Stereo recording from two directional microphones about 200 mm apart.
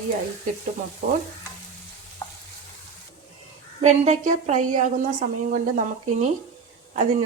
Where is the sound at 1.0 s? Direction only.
40° right (ahead or behind).